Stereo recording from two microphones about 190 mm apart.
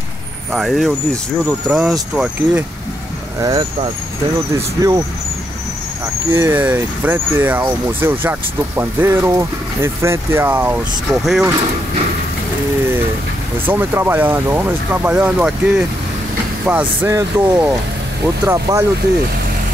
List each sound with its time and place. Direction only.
0.5 s speech: centre (ahead or behind)
3.3 s speech: 20° right (ahead or behind)
6.3 s speech: 10° right (ahead or behind)
13.7 s speech: 10° right (ahead or behind)